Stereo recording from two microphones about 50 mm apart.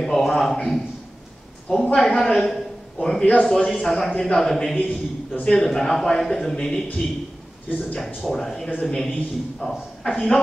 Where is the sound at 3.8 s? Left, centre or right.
Centre.